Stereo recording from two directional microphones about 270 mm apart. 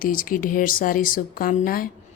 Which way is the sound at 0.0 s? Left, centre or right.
Left.